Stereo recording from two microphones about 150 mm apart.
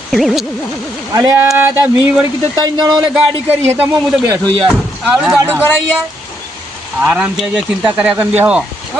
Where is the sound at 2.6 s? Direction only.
25° right (ahead or behind).